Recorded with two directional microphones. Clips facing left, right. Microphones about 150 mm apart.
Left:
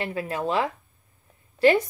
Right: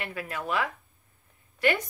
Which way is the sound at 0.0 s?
30° left (ahead or behind).